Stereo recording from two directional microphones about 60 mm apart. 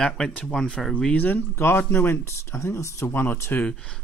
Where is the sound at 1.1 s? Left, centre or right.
Left.